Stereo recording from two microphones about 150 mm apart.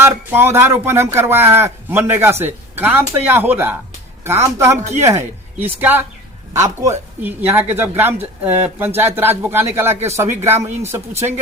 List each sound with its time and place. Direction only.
0.0 s speech: 15° right (ahead or behind)
4.8 s speech: 50° right (ahead or behind)
5.0 s speech: 15° right (ahead or behind)
11.1 s speech: 45° right (ahead or behind)